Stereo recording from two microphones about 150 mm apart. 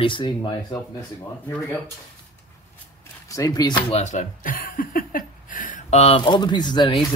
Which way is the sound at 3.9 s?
50° left (ahead or behind).